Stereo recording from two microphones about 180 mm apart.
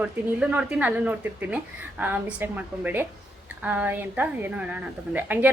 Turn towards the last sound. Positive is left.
turn(degrees=-10)  # may be behind; listen again after turning